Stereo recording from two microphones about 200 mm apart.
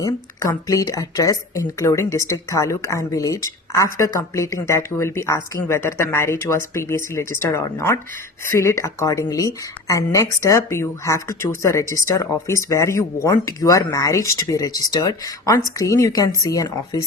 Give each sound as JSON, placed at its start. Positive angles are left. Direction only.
{"t": 0.0, "sound": "speech", "side_deg": 15}